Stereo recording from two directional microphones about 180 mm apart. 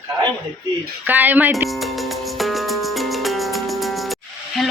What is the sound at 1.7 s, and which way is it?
Music, centre (ahead or behind).